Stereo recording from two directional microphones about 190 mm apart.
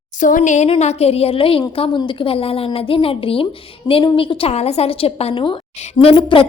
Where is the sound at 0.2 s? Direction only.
45° left (ahead or behind).